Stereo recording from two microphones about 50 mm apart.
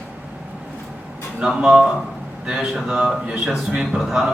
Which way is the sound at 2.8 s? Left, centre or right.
Centre.